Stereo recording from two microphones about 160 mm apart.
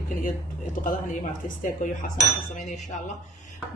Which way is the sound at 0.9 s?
55° left (ahead or behind).